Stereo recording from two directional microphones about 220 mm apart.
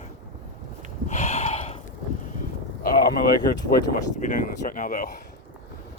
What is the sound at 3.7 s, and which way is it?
Speech, 35° left (ahead or behind).